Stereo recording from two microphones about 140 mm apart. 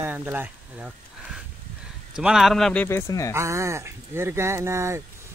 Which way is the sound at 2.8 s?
20° left (ahead or behind).